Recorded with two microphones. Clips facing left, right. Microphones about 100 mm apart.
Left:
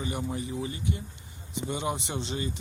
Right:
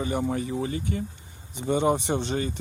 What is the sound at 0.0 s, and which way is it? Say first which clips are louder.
Speech: right 6 dB; 55° right (ahead or behind).